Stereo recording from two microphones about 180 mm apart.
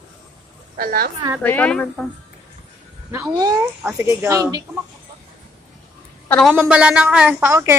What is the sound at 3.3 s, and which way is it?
A woman's voice, 20° right (ahead or behind).